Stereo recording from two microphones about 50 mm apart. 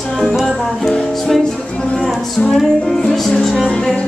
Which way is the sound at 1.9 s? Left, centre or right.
Centre.